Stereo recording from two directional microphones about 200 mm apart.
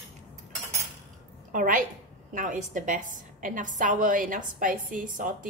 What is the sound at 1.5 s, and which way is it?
A woman's voice, 45° right (ahead or behind).